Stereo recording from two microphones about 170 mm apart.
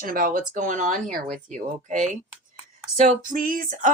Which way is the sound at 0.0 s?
55° right (ahead or behind).